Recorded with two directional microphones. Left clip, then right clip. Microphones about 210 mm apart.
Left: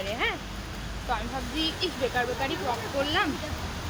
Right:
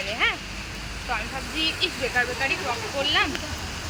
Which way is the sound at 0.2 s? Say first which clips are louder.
Right 6 dB; 25° left (ahead or behind).